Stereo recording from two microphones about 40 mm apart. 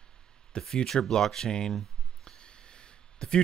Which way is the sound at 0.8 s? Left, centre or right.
Centre.